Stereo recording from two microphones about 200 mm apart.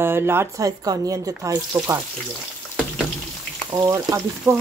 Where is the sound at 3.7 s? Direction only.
15° right (ahead or behind).